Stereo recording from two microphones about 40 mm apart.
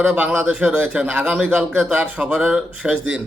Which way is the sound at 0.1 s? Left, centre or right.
Right.